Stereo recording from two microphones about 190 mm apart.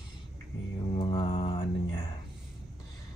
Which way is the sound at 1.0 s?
25° left (ahead or behind).